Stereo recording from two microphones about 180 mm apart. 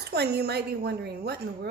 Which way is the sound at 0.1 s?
65° right (ahead or behind).